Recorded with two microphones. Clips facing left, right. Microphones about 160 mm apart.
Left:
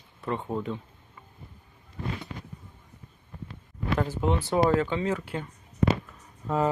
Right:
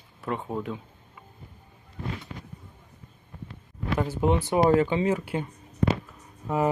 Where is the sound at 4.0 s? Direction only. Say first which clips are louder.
Right 3 dB; 10° right (ahead or behind).